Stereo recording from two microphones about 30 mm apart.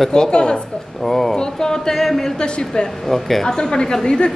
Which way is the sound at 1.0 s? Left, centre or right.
Centre.